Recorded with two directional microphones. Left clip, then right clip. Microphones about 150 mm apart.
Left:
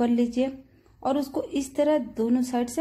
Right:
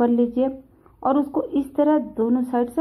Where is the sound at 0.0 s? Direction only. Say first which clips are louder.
Right 5 dB; 15° left (ahead or behind).